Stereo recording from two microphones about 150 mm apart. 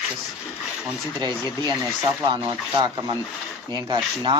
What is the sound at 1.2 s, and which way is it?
Speech, 25° right (ahead or behind).